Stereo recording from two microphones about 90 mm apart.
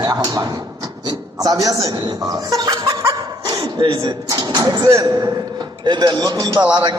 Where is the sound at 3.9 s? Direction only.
45° right (ahead or behind).